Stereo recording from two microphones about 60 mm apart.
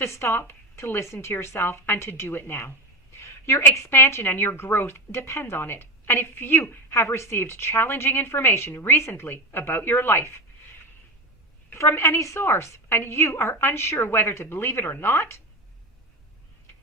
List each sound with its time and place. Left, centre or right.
0.0 s a woman's voice: left
11.8 s a woman's voice: left